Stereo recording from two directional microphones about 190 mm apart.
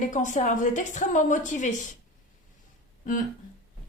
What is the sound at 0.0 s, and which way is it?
A woman's voice, 40° left (ahead or behind).